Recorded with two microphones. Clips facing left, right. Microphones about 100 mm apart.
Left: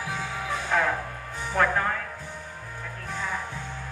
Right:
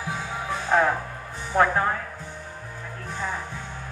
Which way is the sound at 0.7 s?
30° right (ahead or behind).